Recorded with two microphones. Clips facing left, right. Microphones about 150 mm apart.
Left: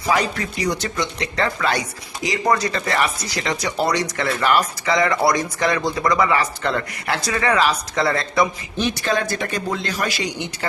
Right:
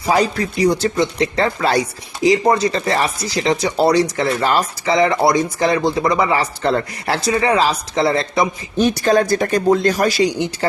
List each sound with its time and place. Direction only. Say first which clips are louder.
0.1 s speech: right 4 dB; 35° right (ahead or behind)
8.8 s speech: right 7 dB; 40° right (ahead or behind)